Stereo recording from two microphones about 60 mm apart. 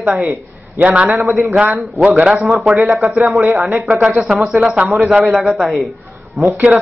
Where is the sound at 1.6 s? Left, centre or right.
Right.